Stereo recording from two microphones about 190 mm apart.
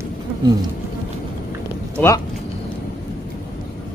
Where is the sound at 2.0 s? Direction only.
15° left (ahead or behind).